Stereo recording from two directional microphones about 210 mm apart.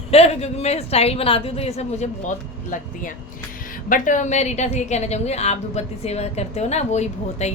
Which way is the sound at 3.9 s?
35° left (ahead or behind).